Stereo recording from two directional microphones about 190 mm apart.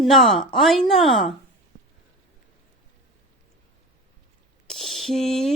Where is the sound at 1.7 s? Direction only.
45° right (ahead or behind).